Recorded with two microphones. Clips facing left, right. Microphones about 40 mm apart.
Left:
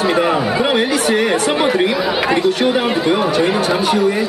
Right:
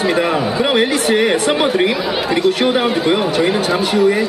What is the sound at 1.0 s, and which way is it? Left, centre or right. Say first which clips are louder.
Speech: right 1 dB; centre.